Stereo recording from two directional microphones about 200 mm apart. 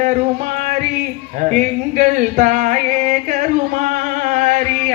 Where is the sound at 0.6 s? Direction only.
35° right (ahead or behind).